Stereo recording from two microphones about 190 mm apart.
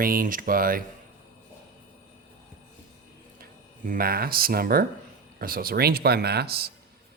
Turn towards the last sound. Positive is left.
turn(degrees=-55)  # may be behind; listen again after turning